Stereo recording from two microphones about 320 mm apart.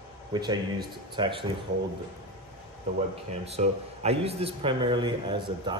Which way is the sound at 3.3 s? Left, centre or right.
Centre.